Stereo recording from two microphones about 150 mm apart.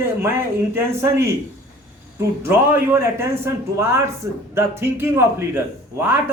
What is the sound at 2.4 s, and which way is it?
A man's voice, 15° right (ahead or behind).